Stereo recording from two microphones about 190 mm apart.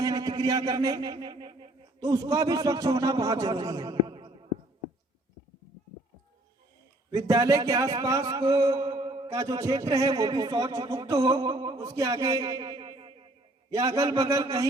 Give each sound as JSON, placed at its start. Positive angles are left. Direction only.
{"t": 0.0, "sound": "a man's voice", "side_deg": -20}
{"t": 7.1, "sound": "a man's voice", "side_deg": -15}